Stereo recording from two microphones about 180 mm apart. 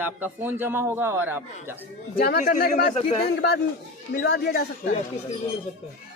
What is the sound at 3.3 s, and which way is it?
A man's voice, 70° left (ahead or behind).